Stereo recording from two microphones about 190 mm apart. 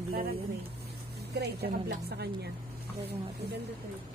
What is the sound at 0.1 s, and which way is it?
A woman's voice, 55° right (ahead or behind).